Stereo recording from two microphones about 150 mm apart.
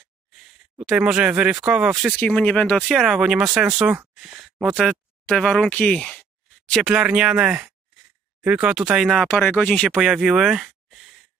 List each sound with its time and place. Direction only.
0.4 s speech: 5° right (ahead or behind)
2.1 s speech: 5° left (ahead or behind)
9.3 s speech: 10° left (ahead or behind)